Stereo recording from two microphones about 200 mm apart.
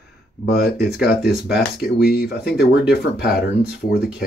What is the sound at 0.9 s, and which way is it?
Speech, 50° left (ahead or behind).